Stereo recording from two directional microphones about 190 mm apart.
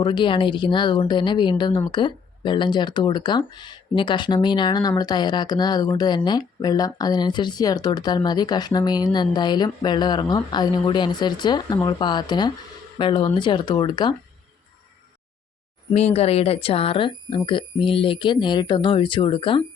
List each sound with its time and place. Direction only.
0.0 s speech: 25° left (ahead or behind)
15.9 s speech: 35° left (ahead or behind)